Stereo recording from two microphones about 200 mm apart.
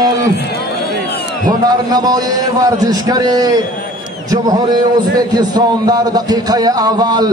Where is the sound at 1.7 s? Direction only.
20° right (ahead or behind).